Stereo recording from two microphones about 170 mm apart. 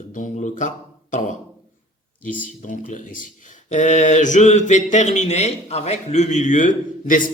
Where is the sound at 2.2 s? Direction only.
50° left (ahead or behind).